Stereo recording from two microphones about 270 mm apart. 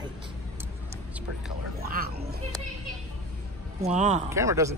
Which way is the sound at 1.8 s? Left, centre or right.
Right.